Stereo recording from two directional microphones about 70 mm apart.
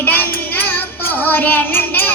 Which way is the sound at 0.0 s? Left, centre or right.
Left.